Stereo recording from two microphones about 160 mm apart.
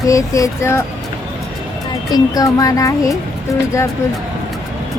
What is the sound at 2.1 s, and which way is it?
Child singing, 25° left (ahead or behind).